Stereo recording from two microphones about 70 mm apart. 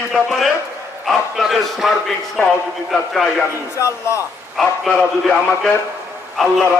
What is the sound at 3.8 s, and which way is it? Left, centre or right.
Speech, left.